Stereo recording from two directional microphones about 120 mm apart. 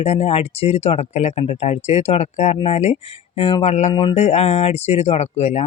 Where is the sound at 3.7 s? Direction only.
70° left (ahead or behind).